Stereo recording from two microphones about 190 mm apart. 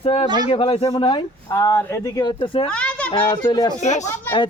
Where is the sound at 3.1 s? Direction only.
25° left (ahead or behind).